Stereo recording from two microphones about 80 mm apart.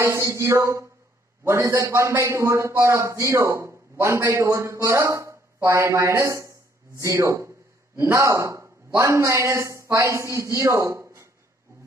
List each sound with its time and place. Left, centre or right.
0.0 s a man's voice: right